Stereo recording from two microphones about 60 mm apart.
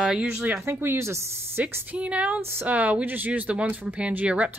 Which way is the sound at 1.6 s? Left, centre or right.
Right.